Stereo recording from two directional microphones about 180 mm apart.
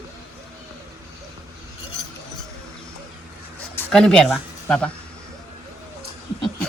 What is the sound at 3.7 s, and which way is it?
Speech, 5° left (ahead or behind).